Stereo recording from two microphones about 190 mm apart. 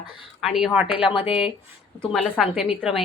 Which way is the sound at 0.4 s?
Centre (ahead or behind).